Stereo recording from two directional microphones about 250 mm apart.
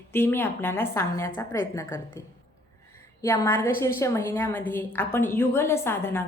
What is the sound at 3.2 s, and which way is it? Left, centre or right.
A woman's voice, centre.